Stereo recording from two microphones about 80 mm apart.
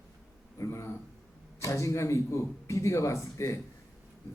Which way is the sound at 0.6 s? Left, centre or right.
Left.